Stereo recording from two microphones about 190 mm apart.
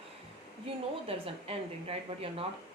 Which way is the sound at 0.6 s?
30° right (ahead or behind).